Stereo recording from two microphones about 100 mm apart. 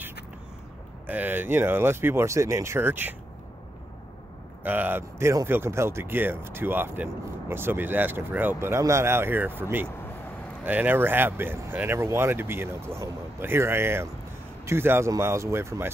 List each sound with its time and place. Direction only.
1.0 s speech: 20° right (ahead or behind)
4.6 s speech: 20° right (ahead or behind)